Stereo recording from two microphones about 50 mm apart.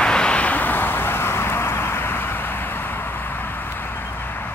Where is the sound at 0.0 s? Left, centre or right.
Centre; by 2.8 s left.